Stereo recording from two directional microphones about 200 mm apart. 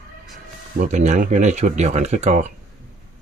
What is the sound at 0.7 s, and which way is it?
Speech, 35° right (ahead or behind).